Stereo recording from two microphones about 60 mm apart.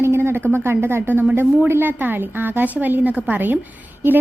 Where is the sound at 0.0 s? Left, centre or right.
Right.